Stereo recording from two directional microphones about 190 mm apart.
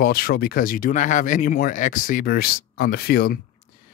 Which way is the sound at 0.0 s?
50° left (ahead or behind).